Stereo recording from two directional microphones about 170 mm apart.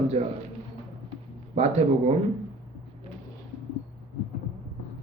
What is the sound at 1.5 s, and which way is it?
Speech, 40° right (ahead or behind).